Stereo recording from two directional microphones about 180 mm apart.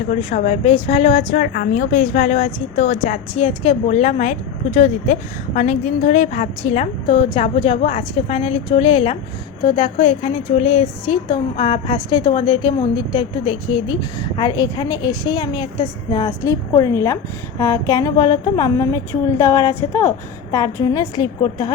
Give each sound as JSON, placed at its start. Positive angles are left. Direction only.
{"t": 0.2, "sound": "a woman's voice", "side_deg": 35}
{"t": 1.4, "sound": "a woman's voice", "side_deg": 45}